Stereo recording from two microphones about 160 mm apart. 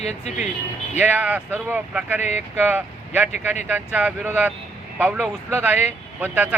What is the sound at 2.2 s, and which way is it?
Speech, 45° left (ahead or behind).